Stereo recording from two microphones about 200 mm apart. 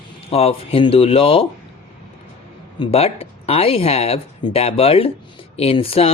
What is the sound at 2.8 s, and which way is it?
Speech, 30° left (ahead or behind).